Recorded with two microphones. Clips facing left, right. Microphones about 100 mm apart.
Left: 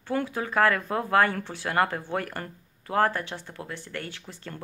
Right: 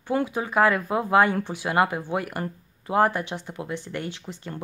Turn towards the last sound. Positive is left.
turn(degrees=-20)  # may be behind; listen again after turning